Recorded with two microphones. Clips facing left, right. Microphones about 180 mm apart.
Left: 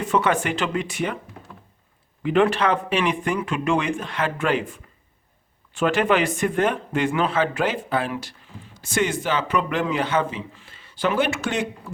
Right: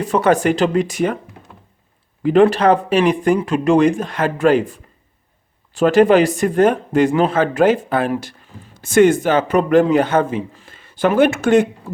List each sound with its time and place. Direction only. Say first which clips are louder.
0.0 s speech: right 6 dB; 40° right (ahead or behind)
2.2 s speech: right 7 dB; 40° right (ahead or behind)